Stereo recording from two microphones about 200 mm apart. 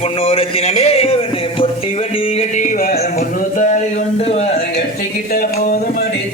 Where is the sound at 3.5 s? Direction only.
40° left (ahead or behind).